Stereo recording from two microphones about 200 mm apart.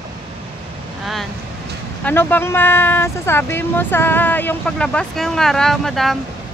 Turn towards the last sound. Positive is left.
turn(degrees=0)  # may be behind; listen again after turning